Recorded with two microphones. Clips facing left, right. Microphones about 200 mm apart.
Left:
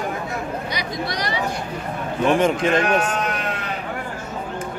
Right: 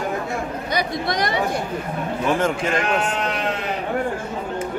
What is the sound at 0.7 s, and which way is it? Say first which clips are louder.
Speech: right 4 dB; 50° right (ahead or behind).